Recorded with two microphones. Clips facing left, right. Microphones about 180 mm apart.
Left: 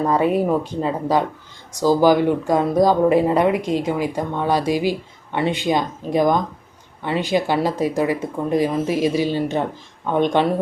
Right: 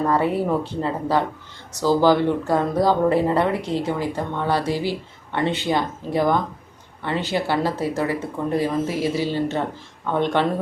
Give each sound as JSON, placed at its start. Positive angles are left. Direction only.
{"t": 0.1, "sound": "speech", "side_deg": 15}